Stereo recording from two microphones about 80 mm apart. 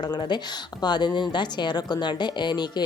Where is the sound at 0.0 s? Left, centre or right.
Left.